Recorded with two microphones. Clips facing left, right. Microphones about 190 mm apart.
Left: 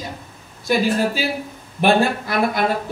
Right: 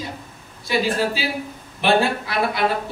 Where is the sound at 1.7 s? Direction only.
45° left (ahead or behind).